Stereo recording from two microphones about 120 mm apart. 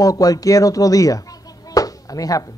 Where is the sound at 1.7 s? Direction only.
30° left (ahead or behind).